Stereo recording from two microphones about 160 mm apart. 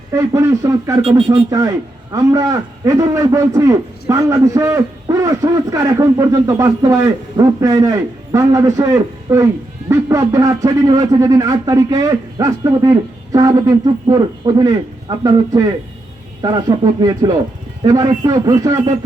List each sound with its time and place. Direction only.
0.1 s a man's voice: 20° right (ahead or behind)
1.0 s speech: 40° right (ahead or behind)
1.5 s a man's voice: 25° right (ahead or behind)